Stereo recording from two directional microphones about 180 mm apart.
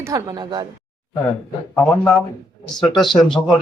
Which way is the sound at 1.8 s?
5° left (ahead or behind).